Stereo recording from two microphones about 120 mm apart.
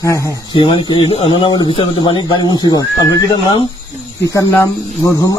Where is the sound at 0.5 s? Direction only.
45° left (ahead or behind).